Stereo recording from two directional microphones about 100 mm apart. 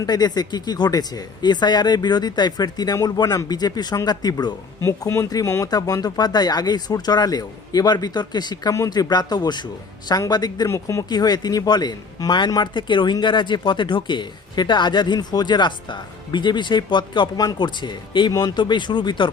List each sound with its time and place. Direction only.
0.0 s speech: 45° left (ahead or behind)
4.8 s speech: 30° left (ahead or behind)
10.7 s speech: 30° left (ahead or behind); by 19.3 s 50° left (ahead or behind)